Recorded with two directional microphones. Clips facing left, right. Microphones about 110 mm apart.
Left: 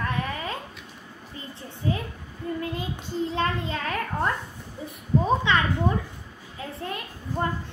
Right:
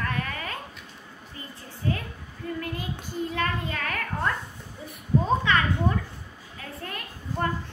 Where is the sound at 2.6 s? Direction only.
25° left (ahead or behind).